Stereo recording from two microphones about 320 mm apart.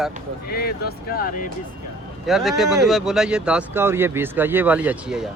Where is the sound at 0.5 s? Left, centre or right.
Left.